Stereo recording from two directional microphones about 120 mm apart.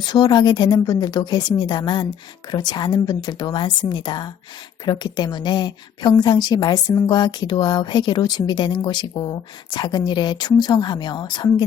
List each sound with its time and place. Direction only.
0.0 s a woman's voice: 40° left (ahead or behind)